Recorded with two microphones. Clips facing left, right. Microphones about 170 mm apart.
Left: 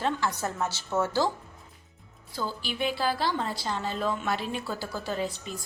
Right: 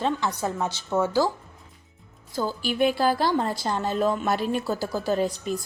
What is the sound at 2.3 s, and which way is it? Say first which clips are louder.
A woman's voice: right 6 dB; 45° right (ahead or behind).